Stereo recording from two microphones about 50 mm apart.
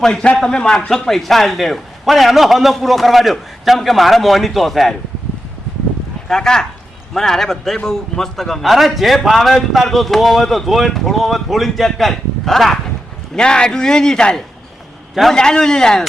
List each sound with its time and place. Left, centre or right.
0.0 s a man's voice: centre
6.2 s a man's voice: centre
15.1 s a man's voice: centre
15.4 s a man's voice: centre